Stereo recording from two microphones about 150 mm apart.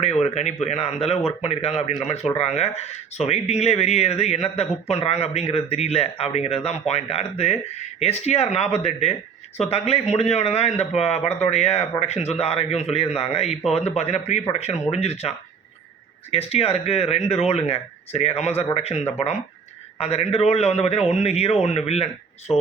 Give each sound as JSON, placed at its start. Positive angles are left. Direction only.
{"t": 0.0, "sound": "speech", "side_deg": 45}
{"t": 16.3, "sound": "speech", "side_deg": 40}